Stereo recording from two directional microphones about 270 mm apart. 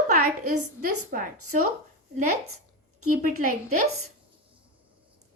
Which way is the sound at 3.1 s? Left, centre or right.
Right.